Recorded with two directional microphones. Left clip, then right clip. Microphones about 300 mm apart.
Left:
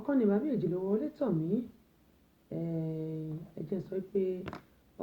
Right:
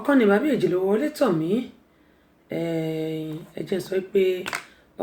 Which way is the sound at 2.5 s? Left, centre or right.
Centre.